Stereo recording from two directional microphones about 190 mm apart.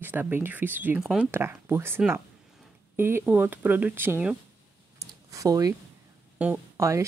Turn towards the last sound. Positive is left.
turn(degrees=-15)  # may be behind; listen again after turning